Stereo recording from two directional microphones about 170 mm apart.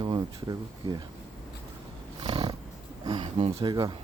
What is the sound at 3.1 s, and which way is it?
Speech, 25° right (ahead or behind).